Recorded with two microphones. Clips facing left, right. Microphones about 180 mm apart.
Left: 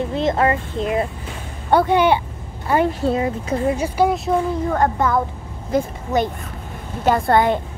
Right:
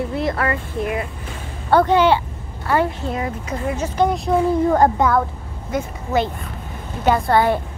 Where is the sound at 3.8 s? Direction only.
10° left (ahead or behind).